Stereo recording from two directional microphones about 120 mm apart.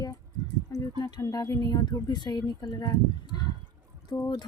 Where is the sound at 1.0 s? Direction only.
30° left (ahead or behind).